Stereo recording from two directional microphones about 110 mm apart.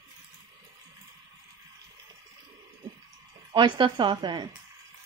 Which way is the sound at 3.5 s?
40° right (ahead or behind).